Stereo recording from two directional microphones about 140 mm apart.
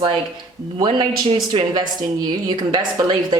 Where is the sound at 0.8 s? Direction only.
35° right (ahead or behind).